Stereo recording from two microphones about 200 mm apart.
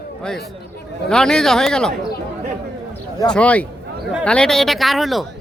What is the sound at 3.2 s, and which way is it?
Speech, 5° left (ahead or behind).